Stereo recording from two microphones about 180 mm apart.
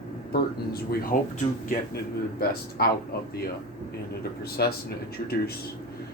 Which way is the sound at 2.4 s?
60° left (ahead or behind).